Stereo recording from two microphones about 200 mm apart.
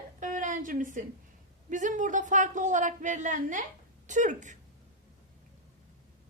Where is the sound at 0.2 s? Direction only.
40° right (ahead or behind).